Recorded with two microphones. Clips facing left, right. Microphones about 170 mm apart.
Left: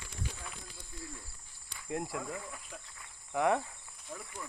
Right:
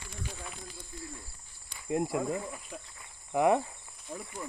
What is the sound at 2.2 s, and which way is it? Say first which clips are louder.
Cricket: right 8 dB; 25° right (ahead or behind).